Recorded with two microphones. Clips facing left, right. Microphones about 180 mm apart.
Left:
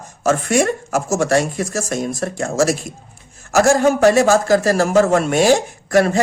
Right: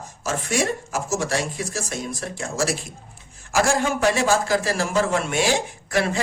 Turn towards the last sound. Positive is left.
turn(degrees=45)  # may be behind; listen again after turning